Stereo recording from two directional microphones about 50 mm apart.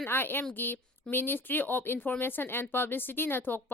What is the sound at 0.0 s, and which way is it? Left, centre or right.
A woman's voice, left.